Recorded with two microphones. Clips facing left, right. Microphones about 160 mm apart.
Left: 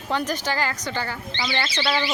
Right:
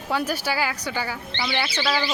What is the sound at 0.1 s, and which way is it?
Speech, 10° right (ahead or behind).